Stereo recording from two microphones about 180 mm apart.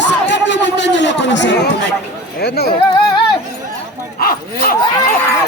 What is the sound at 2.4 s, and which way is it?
Speech, 65° left (ahead or behind).